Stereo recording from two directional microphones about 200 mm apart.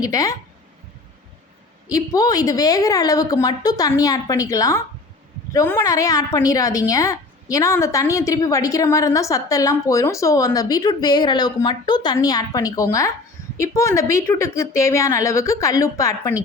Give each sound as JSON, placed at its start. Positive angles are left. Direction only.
{"t": 0.0, "sound": "a woman's voice", "side_deg": 15}
{"t": 1.9, "sound": "a woman's voice", "side_deg": 20}